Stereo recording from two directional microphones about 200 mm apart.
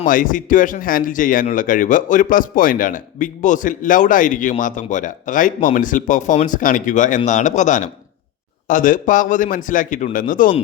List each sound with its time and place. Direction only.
0.0 s speech: 40° left (ahead or behind)